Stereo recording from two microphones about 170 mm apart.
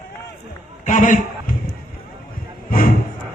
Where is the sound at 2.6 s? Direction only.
55° left (ahead or behind).